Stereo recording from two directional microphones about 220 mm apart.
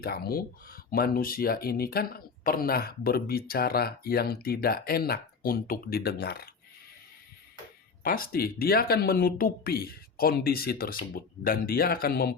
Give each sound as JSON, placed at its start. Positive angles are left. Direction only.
{"t": 0.0, "sound": "speech", "side_deg": 45}
{"t": 8.0, "sound": "speech", "side_deg": 40}